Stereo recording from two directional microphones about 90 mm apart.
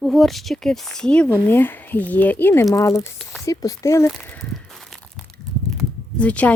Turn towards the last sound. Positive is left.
turn(degrees=15)  # may be behind; listen again after turning